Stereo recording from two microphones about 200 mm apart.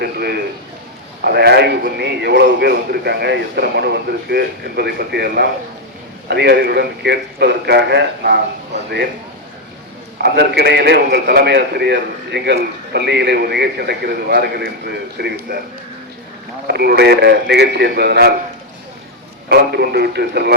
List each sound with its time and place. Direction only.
0.0 s a man's voice: 55° right (ahead or behind)
10.2 s a man's voice: 55° right (ahead or behind)
16.6 s a man's voice: 55° right (ahead or behind)
19.5 s a man's voice: 55° right (ahead or behind)